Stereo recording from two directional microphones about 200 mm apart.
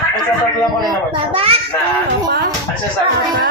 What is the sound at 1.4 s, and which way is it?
Speech, 30° right (ahead or behind).